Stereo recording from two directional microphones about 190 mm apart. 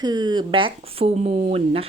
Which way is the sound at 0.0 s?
20° right (ahead or behind).